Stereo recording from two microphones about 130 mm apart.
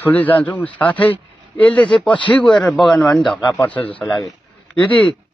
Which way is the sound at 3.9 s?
10° left (ahead or behind).